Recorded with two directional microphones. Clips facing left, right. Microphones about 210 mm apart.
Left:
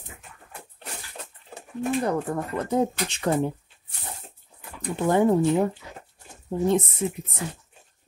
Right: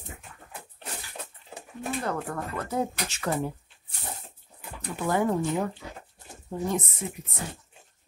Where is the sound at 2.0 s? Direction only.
20° left (ahead or behind).